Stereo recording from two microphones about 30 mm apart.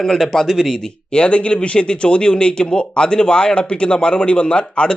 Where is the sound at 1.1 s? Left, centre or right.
Left.